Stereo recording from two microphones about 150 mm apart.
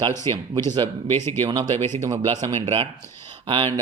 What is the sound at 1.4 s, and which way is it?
Speech, 25° right (ahead or behind).